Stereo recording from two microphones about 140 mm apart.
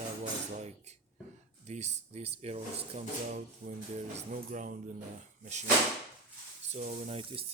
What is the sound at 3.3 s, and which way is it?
Music, 65° right (ahead or behind).